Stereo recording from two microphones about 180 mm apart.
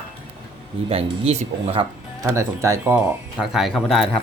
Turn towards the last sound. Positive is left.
turn(degrees=0)  # may be behind; listen again after turning